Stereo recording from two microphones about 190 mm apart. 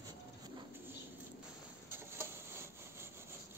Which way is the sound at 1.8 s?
15° right (ahead or behind).